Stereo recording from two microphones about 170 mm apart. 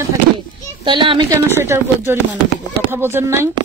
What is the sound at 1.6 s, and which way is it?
Speech, 15° right (ahead or behind).